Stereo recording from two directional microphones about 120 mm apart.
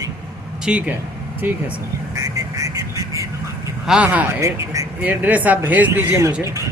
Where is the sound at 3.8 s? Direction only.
10° right (ahead or behind).